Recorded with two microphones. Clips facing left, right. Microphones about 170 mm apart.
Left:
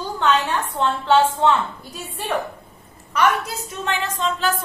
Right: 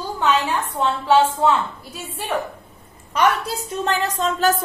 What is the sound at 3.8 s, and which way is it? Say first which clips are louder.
Speech: right 2 dB; 40° right (ahead or behind).